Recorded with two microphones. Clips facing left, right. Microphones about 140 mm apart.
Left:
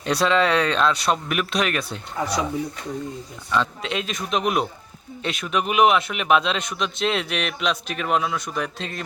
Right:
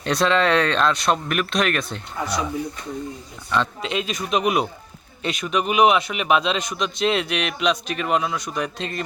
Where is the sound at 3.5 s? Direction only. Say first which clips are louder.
Right 1 dB; centre (ahead or behind).